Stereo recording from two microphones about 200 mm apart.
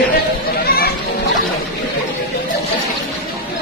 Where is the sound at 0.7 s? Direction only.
50° left (ahead or behind).